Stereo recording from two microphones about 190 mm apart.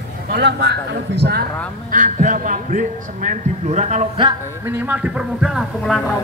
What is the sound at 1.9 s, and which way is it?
A man's voice, 40° right (ahead or behind).